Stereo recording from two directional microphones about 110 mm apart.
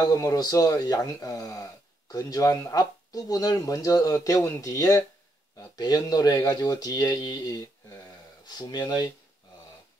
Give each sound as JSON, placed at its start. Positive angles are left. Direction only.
{"t": 0.0, "sound": "speech", "side_deg": 30}